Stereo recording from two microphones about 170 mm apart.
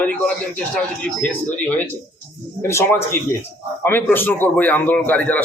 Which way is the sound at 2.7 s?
15° left (ahead or behind).